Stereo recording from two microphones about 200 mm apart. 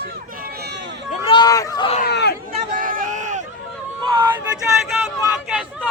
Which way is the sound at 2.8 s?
45° right (ahead or behind).